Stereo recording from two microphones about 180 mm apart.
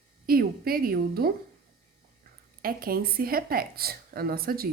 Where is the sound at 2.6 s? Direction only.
55° right (ahead or behind).